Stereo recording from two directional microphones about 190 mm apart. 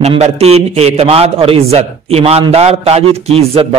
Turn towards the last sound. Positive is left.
turn(degrees=-30)  # may be behind; listen again after turning